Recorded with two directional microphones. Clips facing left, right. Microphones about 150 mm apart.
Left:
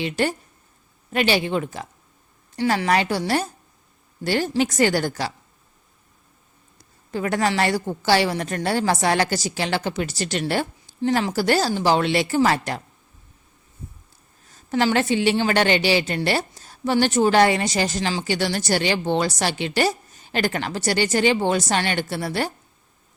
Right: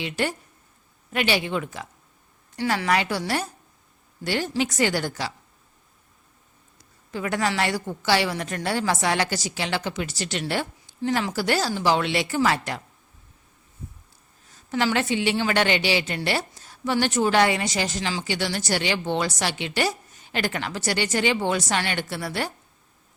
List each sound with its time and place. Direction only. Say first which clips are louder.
0.0 s a woman's voice: left 4 dB; 35° left (ahead or behind)
7.1 s a woman's voice: left 3 dB; 40° left (ahead or behind)
14.5 s a sound: left 4 dB; 40° left (ahead or behind)
14.8 s a woman's voice: left 4 dB; 35° left (ahead or behind)